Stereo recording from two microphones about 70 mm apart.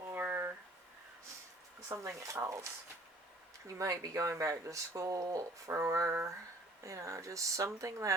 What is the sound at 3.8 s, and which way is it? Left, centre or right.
Speech, right.